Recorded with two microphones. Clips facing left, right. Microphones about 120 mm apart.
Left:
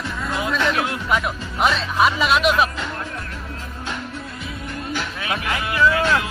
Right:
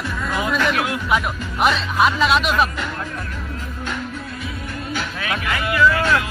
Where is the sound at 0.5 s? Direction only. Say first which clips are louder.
Even; 30° left (ahead or behind).